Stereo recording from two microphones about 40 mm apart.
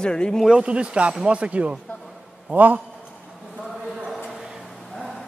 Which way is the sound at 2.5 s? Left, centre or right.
Right.